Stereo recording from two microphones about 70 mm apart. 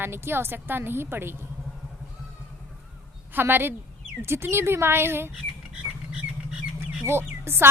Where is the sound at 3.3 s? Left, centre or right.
Right.